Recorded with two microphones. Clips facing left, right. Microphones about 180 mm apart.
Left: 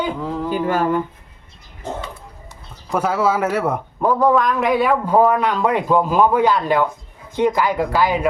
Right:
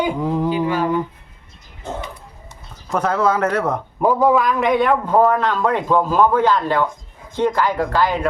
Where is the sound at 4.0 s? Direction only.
10° right (ahead or behind); by 8.2 s 10° left (ahead or behind).